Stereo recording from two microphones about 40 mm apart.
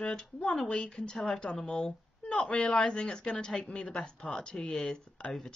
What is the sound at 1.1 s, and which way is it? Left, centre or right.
Speech, centre.